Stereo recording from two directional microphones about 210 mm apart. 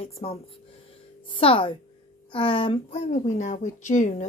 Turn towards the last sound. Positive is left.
turn(degrees=35)  # may be behind; listen again after turning